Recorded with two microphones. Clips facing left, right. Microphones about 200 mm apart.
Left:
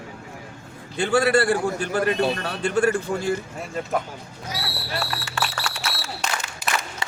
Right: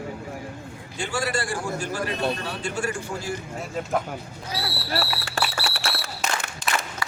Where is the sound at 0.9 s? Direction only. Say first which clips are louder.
Left 9 dB; 60° left (ahead or behind).